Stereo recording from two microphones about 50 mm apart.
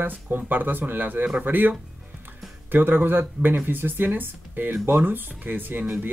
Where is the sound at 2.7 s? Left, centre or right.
Right.